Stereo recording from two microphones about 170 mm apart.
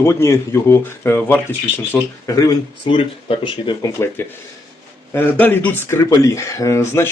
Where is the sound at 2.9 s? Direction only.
30° left (ahead or behind).